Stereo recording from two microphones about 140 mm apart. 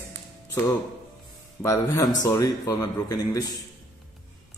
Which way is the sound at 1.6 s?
25° left (ahead or behind).